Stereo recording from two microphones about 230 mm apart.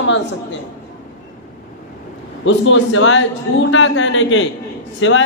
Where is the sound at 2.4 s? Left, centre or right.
Left.